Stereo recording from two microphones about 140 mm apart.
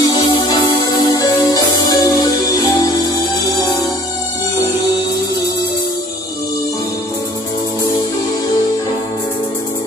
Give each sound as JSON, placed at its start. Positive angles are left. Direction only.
{"t": 0.0, "sound": "music", "side_deg": 25}